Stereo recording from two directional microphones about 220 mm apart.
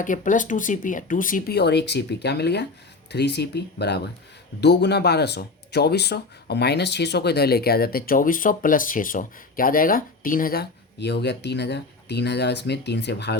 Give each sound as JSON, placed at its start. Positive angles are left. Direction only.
{"t": 0.0, "sound": "speech", "side_deg": 35}